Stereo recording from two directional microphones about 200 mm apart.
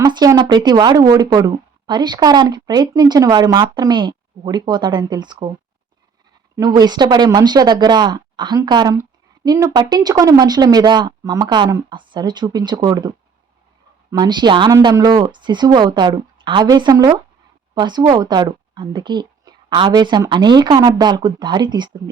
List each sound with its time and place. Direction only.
0.0 s speech: 20° right (ahead or behind)
6.6 s speech: 20° right (ahead or behind)